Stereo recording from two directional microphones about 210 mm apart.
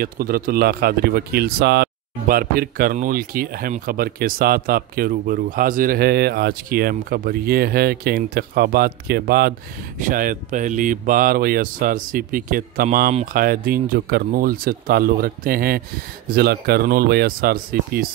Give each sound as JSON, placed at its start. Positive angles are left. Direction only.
{"t": 0.0, "sound": "a man's voice", "side_deg": -45}